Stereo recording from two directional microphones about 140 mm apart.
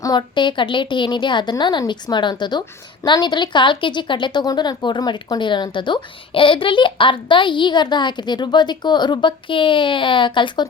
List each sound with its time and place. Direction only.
0.0 s a woman's voice: 30° left (ahead or behind)